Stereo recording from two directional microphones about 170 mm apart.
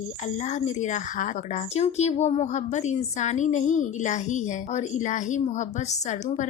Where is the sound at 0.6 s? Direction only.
45° left (ahead or behind).